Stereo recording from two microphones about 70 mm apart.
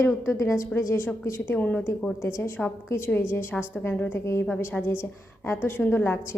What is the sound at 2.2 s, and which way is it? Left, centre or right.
A woman's voice, left.